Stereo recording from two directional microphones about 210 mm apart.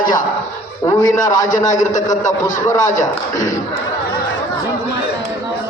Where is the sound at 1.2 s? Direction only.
35° left (ahead or behind).